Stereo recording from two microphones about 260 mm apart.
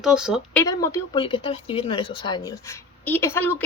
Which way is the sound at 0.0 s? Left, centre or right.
Centre.